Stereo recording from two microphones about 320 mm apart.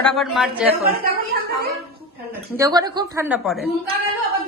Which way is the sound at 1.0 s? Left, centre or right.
Right.